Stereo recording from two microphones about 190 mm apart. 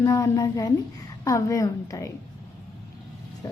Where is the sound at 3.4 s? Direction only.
20° left (ahead or behind).